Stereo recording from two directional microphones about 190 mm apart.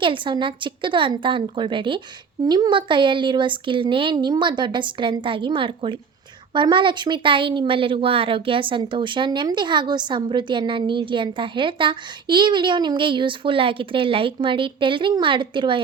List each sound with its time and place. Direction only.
0.0 s speech: 25° right (ahead or behind)